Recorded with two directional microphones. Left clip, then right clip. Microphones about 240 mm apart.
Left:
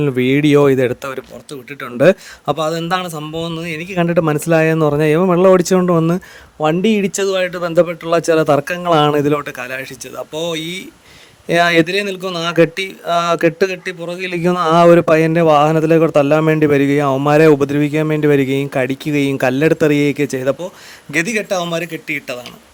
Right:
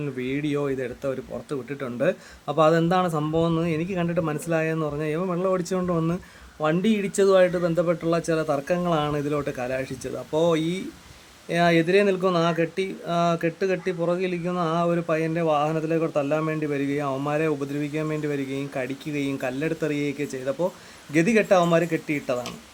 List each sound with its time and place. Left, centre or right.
0.0 s a man's voice: left
3.4 s a man's voice: centre
3.7 s a man's voice: left